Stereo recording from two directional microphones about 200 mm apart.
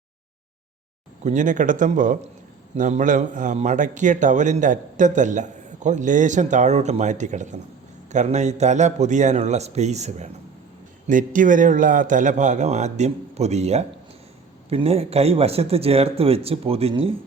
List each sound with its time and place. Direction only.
1.2 s a man's voice: 40° right (ahead or behind)